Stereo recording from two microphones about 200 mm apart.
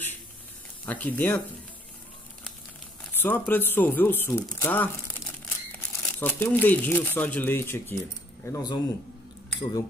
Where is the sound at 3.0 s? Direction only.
10° left (ahead or behind).